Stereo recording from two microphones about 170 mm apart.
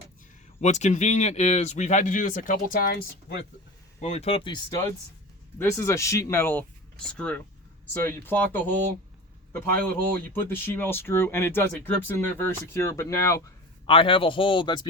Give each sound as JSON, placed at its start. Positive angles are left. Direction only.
{"t": 0.6, "sound": "speech", "side_deg": 45}
{"t": 4.0, "sound": "speech", "side_deg": 40}
{"t": 5.5, "sound": "speech", "side_deg": 15}
{"t": 13.8, "sound": "speech", "side_deg": 30}